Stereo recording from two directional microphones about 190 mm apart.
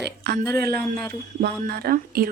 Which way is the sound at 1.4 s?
55° right (ahead or behind).